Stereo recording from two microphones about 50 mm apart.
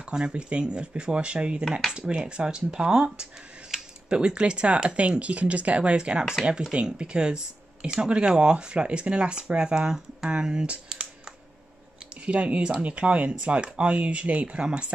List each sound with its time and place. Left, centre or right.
0.0 s speech: right